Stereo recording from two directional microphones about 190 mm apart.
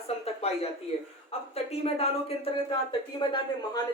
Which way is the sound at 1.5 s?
30° left (ahead or behind).